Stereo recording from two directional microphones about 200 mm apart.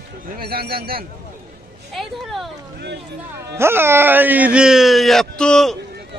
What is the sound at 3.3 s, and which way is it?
Speech, 15° right (ahead or behind).